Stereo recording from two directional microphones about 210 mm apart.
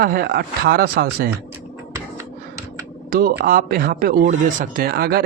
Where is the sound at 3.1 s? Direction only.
45° right (ahead or behind).